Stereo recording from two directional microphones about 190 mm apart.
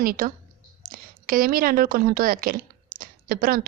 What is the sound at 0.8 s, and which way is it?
A woman's voice, 50° right (ahead or behind).